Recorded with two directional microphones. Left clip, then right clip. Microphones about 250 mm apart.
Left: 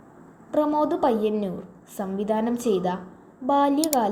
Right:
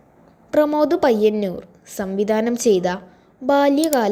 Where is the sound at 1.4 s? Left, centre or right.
Right.